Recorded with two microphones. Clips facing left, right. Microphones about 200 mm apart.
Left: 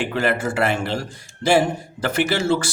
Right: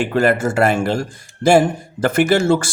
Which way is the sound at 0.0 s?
45° right (ahead or behind).